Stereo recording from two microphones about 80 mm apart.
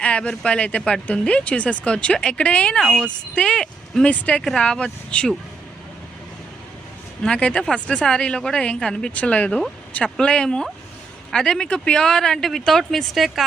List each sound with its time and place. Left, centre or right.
0.0 s speech: centre
7.2 s speech: centre